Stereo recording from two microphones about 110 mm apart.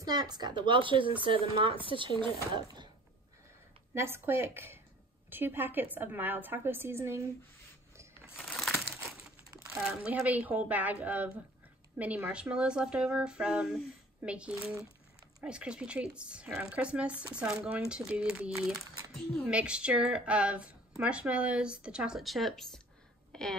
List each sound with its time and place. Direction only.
0.0 s speech: 40° right (ahead or behind)
3.9 s a woman's voice: 20° right (ahead or behind)
9.8 s a woman's voice: 10° right (ahead or behind)
23.3 s a sound: 5° left (ahead or behind)